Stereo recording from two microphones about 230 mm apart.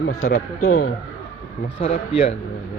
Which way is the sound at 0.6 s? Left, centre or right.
Left.